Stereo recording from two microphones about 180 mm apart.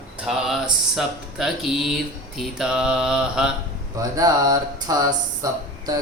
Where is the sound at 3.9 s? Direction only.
20° right (ahead or behind).